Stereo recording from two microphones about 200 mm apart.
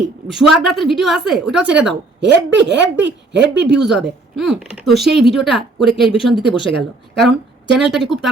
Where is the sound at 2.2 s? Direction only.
60° right (ahead or behind).